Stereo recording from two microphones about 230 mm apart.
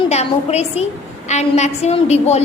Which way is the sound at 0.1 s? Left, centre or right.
Left.